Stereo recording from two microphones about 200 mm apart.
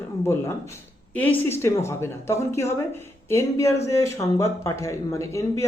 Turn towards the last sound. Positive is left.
turn(degrees=15)  # may be behind; listen again after turning